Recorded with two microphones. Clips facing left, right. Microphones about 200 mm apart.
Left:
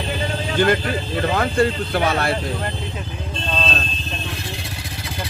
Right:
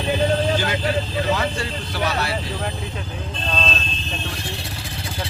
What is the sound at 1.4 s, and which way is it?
Speech, 55° left (ahead or behind).